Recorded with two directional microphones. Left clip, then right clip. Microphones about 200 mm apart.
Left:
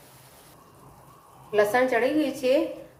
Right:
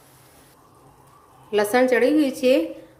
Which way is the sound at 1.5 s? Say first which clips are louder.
Right 3 dB; 60° right (ahead or behind).